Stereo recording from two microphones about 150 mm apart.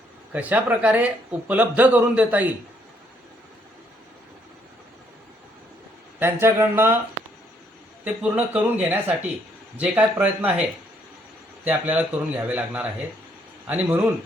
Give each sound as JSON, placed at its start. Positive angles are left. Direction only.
{"t": 0.3, "sound": "speech", "side_deg": -10}
{"t": 6.1, "sound": "speech", "side_deg": -15}
{"t": 8.0, "sound": "speech", "side_deg": -10}